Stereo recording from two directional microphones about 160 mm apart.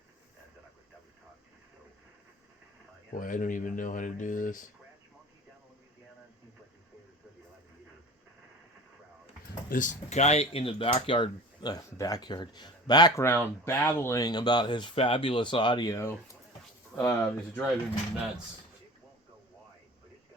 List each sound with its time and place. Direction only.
3.2 s speech: 55° left (ahead or behind)
9.6 s speech: 55° left (ahead or behind); by 17.6 s 20° left (ahead or behind)